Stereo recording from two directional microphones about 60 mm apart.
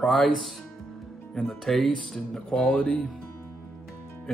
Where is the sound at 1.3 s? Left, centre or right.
Centre.